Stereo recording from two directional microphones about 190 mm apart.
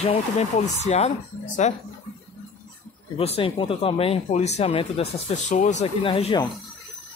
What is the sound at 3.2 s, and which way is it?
Speech, 30° left (ahead or behind).